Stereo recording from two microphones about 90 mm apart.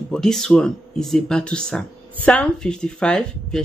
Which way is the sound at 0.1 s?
5° left (ahead or behind).